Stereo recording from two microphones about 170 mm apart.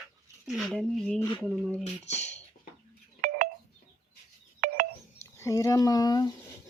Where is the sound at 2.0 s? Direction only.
40° left (ahead or behind).